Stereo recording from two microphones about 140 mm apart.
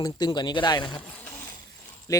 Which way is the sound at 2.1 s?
25° left (ahead or behind).